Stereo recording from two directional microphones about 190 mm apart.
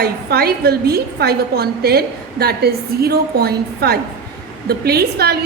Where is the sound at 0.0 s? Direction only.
55° right (ahead or behind).